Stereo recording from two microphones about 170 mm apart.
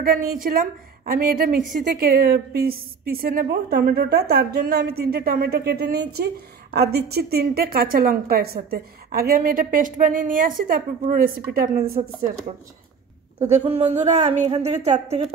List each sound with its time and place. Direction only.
0.0 s a woman's voice: 60° right (ahead or behind)
13.5 s a woman's voice: 40° right (ahead or behind)